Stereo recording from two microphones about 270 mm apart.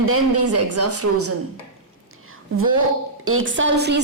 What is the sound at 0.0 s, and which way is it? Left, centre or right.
Speech, right.